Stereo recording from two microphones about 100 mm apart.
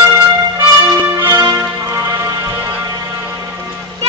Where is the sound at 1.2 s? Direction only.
25° right (ahead or behind).